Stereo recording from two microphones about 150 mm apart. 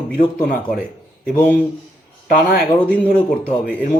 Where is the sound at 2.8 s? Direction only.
10° left (ahead or behind).